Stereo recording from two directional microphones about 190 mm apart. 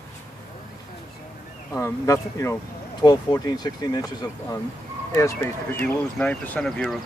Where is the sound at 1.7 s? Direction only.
15° left (ahead or behind).